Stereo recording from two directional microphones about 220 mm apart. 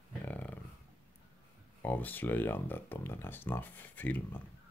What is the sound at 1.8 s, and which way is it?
Speech, 10° left (ahead or behind).